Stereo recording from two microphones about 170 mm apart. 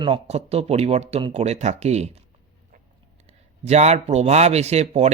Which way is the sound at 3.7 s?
40° right (ahead or behind).